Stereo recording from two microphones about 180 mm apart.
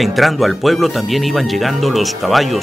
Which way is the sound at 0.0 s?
Centre (ahead or behind).